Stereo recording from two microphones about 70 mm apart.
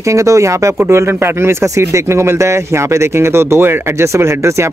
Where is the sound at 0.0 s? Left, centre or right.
Right.